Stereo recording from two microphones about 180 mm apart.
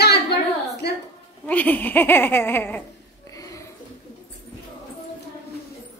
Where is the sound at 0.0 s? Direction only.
65° left (ahead or behind).